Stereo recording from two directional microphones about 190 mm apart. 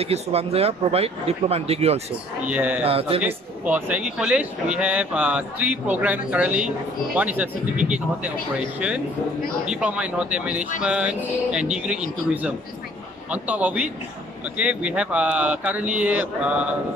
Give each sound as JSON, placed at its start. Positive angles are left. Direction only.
{"t": 0.0, "sound": "speech", "side_deg": -30}
{"t": 2.4, "sound": "speech", "side_deg": -10}
{"t": 2.8, "sound": "speech", "side_deg": -30}
{"t": 3.2, "sound": "speech", "side_deg": -10}
{"t": 10.8, "sound": "music", "side_deg": -5}
{"t": 13.3, "sound": "speech", "side_deg": -10}